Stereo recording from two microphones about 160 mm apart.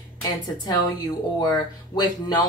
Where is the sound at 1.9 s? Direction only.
25° left (ahead or behind).